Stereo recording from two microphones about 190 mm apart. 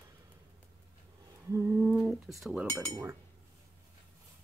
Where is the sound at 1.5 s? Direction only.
10° right (ahead or behind).